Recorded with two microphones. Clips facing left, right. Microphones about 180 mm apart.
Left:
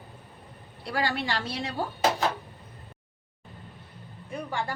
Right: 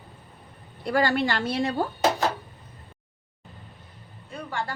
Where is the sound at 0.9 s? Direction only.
50° right (ahead or behind).